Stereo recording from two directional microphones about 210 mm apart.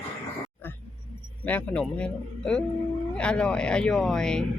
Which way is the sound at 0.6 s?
10° left (ahead or behind).